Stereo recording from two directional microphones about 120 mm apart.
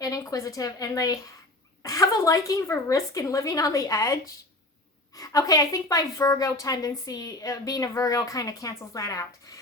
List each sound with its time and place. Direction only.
0.0 s a woman's voice: 30° left (ahead or behind)